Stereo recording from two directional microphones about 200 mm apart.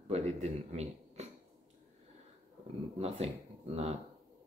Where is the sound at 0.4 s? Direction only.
35° right (ahead or behind).